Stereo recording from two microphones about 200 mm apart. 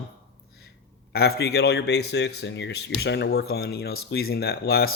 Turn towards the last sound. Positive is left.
turn(degrees=50)  # may be behind; listen again after turning